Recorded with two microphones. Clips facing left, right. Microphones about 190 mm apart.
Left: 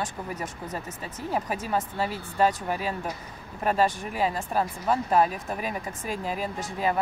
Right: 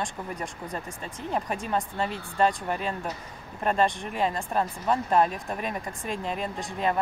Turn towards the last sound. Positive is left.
turn(degrees=0)  # may be behind; listen again after turning